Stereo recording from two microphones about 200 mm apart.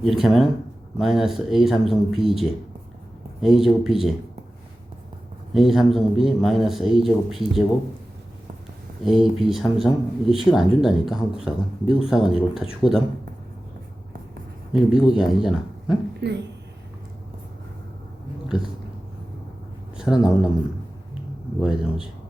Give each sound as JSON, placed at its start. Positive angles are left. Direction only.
{"t": 0.0, "sound": "speech", "side_deg": 0}
{"t": 5.5, "sound": "speech", "side_deg": 0}
{"t": 9.0, "sound": "speech", "side_deg": 0}
{"t": 14.7, "sound": "a man's voice", "side_deg": 0}
{"t": 16.2, "sound": "speech", "side_deg": -55}
{"t": 20.0, "sound": "speech", "side_deg": -5}
{"t": 21.6, "sound": "speech", "side_deg": 0}